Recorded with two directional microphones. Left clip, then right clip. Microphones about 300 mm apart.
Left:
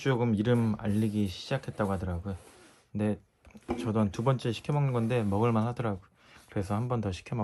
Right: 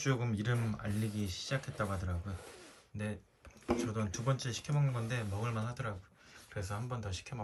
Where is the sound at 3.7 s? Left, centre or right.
Centre.